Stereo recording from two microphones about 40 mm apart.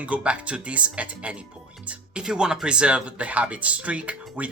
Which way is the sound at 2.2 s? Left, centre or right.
Centre.